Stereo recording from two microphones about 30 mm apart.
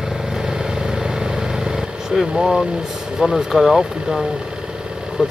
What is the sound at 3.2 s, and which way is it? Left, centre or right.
Speech, centre.